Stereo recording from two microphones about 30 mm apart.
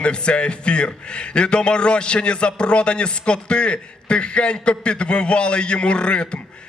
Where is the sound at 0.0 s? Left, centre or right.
Left.